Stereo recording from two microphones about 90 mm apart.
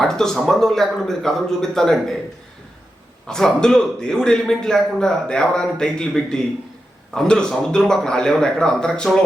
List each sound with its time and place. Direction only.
0.0 s speech: 5° left (ahead or behind)
3.2 s a man's voice: 5° left (ahead or behind)